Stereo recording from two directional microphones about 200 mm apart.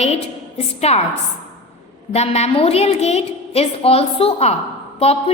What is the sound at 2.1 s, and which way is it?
A woman's voice, 30° left (ahead or behind).